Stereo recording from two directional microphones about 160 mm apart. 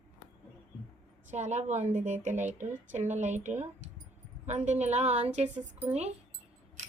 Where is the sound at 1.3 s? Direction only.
45° right (ahead or behind).